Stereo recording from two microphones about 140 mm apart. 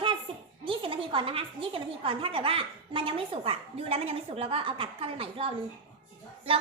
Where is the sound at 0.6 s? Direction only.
40° right (ahead or behind).